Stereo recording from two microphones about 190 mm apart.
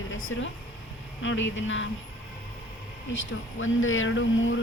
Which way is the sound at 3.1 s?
85° left.